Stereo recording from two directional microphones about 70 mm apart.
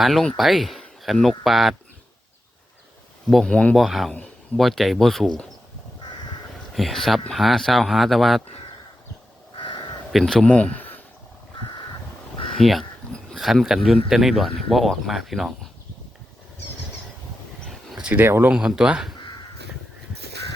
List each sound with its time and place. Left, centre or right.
0.0 s speech: centre
3.4 s speech: centre
3.8 s speech: centre
6.7 s speech: centre
10.2 s speech: centre
10.5 s speech: centre
12.5 s speech: centre
18.0 s speech: right
18.5 s speech: centre